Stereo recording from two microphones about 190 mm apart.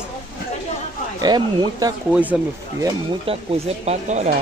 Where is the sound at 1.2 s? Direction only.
20° right (ahead or behind).